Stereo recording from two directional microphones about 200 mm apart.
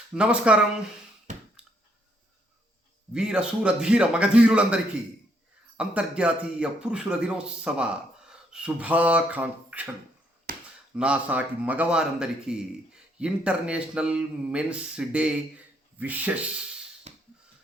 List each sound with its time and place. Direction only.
0.1 s a man's voice: 5° right (ahead or behind)
3.1 s a man's voice: 5° right (ahead or behind)
10.5 s chop: 45° right (ahead or behind)
10.9 s a man's voice: 5° right (ahead or behind)
17.1 s mechanisms: 35° right (ahead or behind)